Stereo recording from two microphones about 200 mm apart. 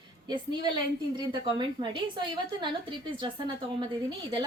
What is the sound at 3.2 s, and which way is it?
Speech, 25° right (ahead or behind).